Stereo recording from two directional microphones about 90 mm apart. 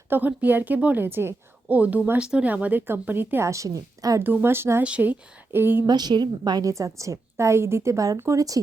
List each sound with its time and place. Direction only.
0.1 s a woman's voice: 20° right (ahead or behind); by 4.2 s 40° right (ahead or behind)
4.2 s a woman's voice: 20° right (ahead or behind)
4.8 s speech: 15° right (ahead or behind)
5.8 s a woman's voice: 50° right (ahead or behind)
6.7 s a woman's voice: 35° right (ahead or behind)